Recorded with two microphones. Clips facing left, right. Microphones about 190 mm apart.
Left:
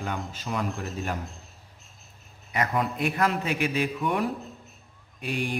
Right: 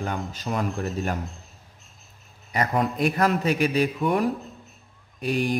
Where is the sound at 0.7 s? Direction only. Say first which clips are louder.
Right 5 dB; centre (ahead or behind).